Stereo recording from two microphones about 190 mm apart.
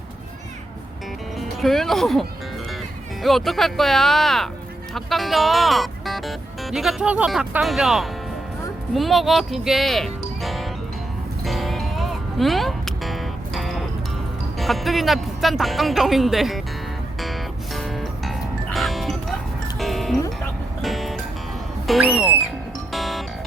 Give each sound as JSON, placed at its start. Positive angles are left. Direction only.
{"t": 1.6, "sound": "speech", "side_deg": 0}
{"t": 3.2, "sound": "speech", "side_deg": 0}
{"t": 11.4, "sound": "music", "side_deg": 0}
{"t": 14.6, "sound": "speech", "side_deg": 0}
{"t": 17.7, "sound": "music", "side_deg": 0}
{"t": 21.8, "sound": "speech", "side_deg": 0}
{"t": 22.9, "sound": "music", "side_deg": 0}